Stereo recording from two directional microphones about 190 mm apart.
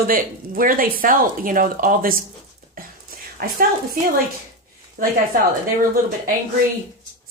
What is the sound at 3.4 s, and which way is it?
Speech, 50° right (ahead or behind).